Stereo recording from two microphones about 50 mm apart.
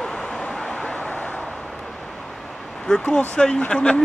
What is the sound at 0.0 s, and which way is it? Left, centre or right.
Vehicle, centre.